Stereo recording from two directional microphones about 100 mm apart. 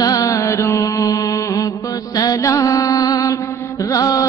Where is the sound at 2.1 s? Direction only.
35° left (ahead or behind).